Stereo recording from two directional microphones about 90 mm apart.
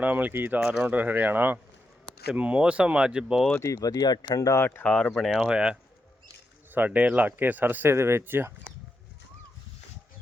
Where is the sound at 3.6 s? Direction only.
40° left (ahead or behind).